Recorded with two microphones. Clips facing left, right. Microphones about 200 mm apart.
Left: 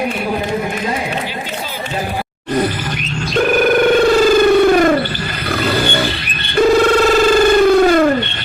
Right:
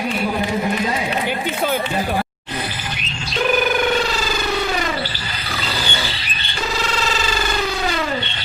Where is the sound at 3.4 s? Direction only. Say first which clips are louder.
Left 6 dB; 55° left (ahead or behind).